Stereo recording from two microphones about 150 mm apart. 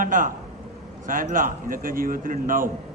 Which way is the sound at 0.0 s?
60° right (ahead or behind).